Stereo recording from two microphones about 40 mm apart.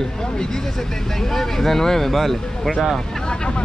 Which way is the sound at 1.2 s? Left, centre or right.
Centre.